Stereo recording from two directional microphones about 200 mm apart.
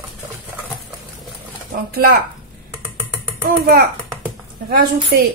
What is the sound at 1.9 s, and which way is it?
Speech, 50° right (ahead or behind).